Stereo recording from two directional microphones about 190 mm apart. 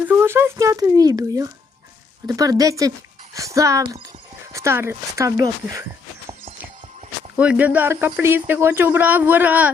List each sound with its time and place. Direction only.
0.1 s speech: 10° right (ahead or behind)
7.3 s speech: 10° right (ahead or behind)